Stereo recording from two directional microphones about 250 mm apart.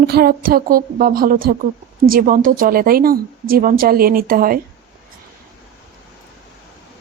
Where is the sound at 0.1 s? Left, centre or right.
Right.